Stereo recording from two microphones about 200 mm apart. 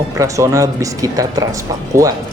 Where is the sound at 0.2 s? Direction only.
15° right (ahead or behind).